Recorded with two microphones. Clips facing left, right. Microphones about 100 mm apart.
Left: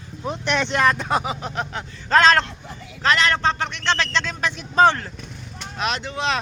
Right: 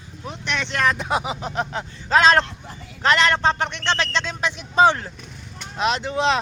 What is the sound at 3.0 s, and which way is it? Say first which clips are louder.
A man's voice: right 1 dB; 25° right (ahead or behind).